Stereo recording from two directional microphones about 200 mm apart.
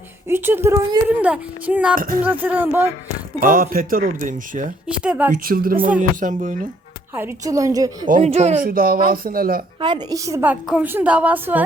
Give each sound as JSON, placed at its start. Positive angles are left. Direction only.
{"t": 0.3, "sound": "a woman's voice", "side_deg": -10}
{"t": 2.0, "sound": "speech", "side_deg": -45}
{"t": 2.2, "sound": "a woman's voice", "side_deg": -10}
{"t": 3.4, "sound": "speech", "side_deg": -45}
{"t": 4.9, "sound": "speech", "side_deg": -5}
{"t": 5.3, "sound": "speech", "side_deg": -45}
{"t": 7.2, "sound": "a woman's voice", "side_deg": -15}
{"t": 8.0, "sound": "speech", "side_deg": -35}
{"t": 8.6, "sound": "speech", "side_deg": -45}
{"t": 9.8, "sound": "a woman's voice", "side_deg": -20}